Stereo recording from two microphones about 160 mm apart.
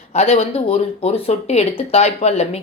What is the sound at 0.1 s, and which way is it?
Speech, 40° left (ahead or behind).